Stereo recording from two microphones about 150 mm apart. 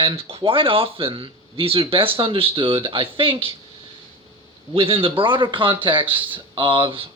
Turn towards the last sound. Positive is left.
turn(degrees=-35)  # may be behind; listen again after turning